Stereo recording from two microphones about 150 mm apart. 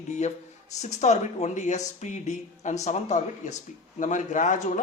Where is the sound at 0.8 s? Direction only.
50° left (ahead or behind).